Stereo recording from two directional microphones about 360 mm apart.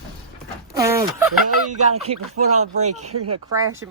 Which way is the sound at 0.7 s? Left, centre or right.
Centre.